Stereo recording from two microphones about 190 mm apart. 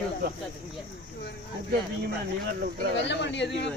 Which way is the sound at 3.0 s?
70° left (ahead or behind).